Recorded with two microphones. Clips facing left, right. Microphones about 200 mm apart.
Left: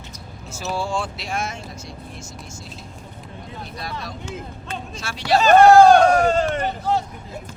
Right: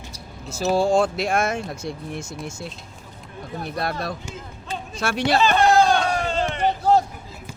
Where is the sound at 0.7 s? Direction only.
40° right (ahead or behind); by 5.2 s 55° right (ahead or behind).